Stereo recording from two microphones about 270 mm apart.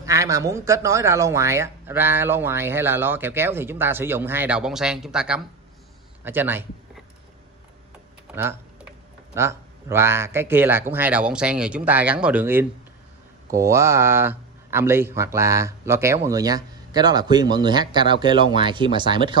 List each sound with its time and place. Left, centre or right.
0.0 s speech: centre
9.3 s speech: centre